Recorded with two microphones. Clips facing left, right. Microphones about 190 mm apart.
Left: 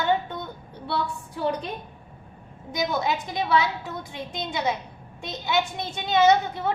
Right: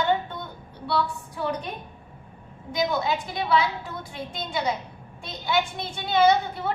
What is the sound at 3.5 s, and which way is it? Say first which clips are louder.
A woman's voice: even; 20° left (ahead or behind).